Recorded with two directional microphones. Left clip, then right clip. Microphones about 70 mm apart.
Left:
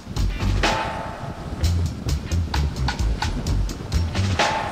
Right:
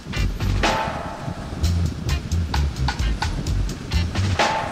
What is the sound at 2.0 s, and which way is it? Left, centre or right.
Music, left.